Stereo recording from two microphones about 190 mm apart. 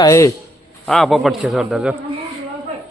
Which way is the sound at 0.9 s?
Centre (ahead or behind).